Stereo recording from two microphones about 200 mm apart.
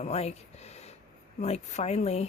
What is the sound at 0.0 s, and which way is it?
Speech, 35° left (ahead or behind).